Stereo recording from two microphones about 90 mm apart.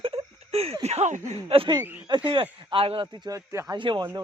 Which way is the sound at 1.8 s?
25° right (ahead or behind).